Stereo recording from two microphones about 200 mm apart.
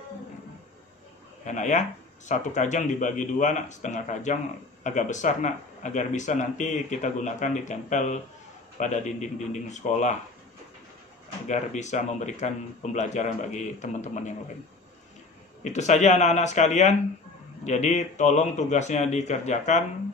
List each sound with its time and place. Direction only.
1.4 s speech: 40° left (ahead or behind)
11.4 s speech: 35° left (ahead or behind)
15.6 s speech: 35° left (ahead or behind)